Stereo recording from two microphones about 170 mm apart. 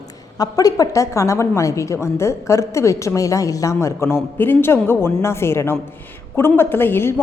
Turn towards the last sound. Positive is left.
turn(degrees=10)  # may be behind; listen again after turning